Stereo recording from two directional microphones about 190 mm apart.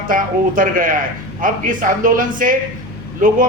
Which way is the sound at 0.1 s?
45° right (ahead or behind).